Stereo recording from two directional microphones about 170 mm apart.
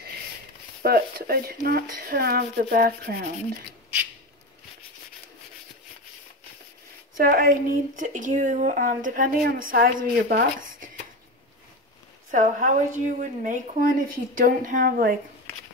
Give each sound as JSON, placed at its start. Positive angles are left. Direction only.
{"t": 0.8, "sound": "speech", "side_deg": -65}
{"t": 7.2, "sound": "speech", "side_deg": -60}
{"t": 12.3, "sound": "speech", "side_deg": -50}